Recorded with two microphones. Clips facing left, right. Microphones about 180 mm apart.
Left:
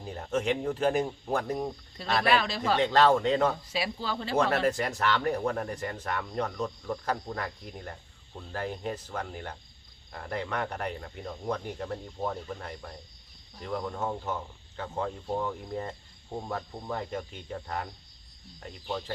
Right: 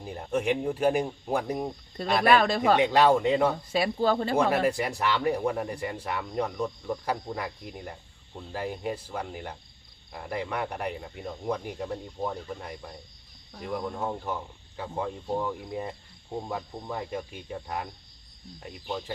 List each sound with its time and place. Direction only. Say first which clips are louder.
0.0 s speech: right 2 dB; 10° right (ahead or behind)
2.2 s speech: right 6 dB; 50° right (ahead or behind)
2.7 s speech: even; 15° right (ahead or behind)
3.7 s speech: right 8 dB; 50° right (ahead or behind)
4.4 s speech: right 2 dB; 10° right (ahead or behind)